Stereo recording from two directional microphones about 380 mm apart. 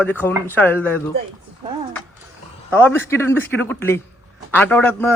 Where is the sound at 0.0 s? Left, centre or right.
Centre.